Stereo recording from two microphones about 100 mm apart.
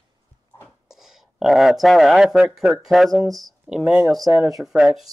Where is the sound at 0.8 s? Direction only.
5° right (ahead or behind).